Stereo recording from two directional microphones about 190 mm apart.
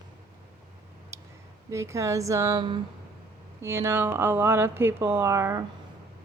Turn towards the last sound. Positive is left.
turn(degrees=-15)  # may be behind; listen again after turning